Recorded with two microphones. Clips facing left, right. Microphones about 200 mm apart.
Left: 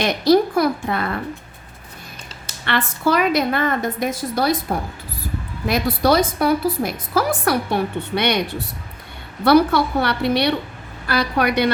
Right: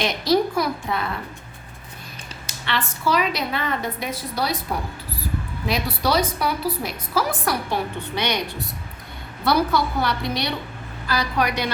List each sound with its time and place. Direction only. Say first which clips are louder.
0.0 s a woman's voice: left 5 dB; 55° left (ahead or behind)
2.6 s a woman's voice: left 4 dB; 55° left (ahead or behind)
5.6 s a woman's voice: left 6 dB; 50° left (ahead or behind)
9.5 s a woman's voice: left 6 dB; 65° left (ahead or behind)